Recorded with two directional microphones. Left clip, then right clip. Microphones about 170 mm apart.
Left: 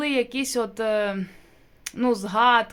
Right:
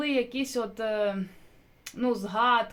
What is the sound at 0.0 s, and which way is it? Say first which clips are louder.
Speech: left 4 dB; 25° left (ahead or behind).